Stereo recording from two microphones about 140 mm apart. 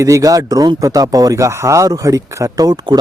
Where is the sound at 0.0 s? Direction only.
25° right (ahead or behind).